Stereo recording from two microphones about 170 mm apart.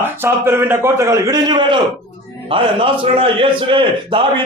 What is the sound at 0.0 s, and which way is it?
A man's voice, 15° right (ahead or behind).